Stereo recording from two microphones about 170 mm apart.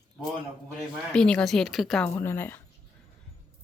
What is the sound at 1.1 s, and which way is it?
Speech, 5° left (ahead or behind).